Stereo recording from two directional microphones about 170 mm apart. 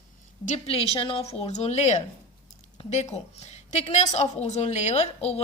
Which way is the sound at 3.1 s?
40° left (ahead or behind).